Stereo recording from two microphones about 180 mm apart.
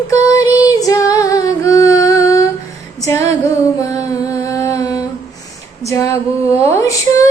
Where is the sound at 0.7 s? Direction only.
20° left (ahead or behind).